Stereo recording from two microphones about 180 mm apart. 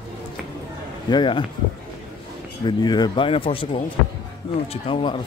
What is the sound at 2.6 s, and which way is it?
Speech, 25° left (ahead or behind).